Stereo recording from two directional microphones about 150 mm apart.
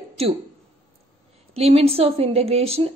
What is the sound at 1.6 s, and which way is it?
A woman's voice, 40° right (ahead or behind).